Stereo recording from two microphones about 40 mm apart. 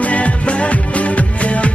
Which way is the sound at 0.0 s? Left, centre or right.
Left.